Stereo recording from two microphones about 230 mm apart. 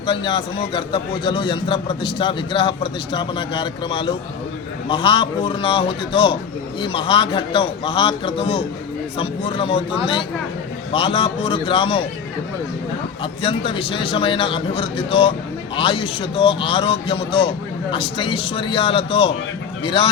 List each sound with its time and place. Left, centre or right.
0.0 s a man's voice: left
13.4 s a man's voice: left